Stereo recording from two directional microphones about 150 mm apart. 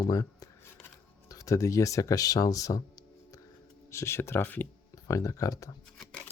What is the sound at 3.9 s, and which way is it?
Speech, 15° left (ahead or behind).